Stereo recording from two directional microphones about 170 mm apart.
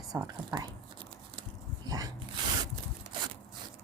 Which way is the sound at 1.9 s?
20° right (ahead or behind).